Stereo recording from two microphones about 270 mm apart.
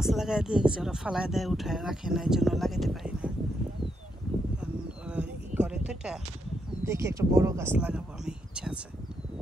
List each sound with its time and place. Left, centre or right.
0.0 s speech: centre
4.6 s a sound: centre
6.8 s speech: centre